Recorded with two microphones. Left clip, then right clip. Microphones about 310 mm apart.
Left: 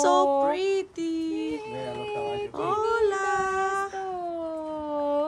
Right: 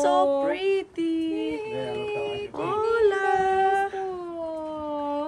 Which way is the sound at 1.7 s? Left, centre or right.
Left.